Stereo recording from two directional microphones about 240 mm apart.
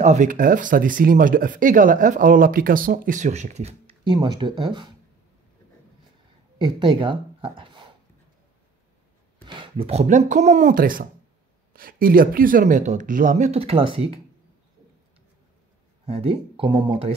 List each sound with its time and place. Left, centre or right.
0.0 s speech: right
6.6 s speech: right
9.6 s speech: right
16.1 s speech: right